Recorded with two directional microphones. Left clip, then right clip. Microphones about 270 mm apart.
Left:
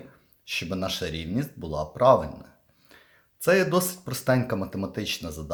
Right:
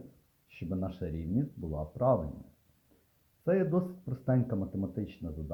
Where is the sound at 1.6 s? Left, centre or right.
Left.